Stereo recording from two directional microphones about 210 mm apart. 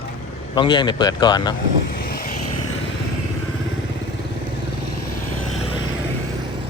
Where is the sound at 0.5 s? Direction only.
20° left (ahead or behind).